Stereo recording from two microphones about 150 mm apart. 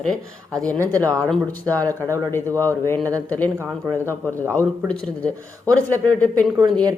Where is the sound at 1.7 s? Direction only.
25° right (ahead or behind).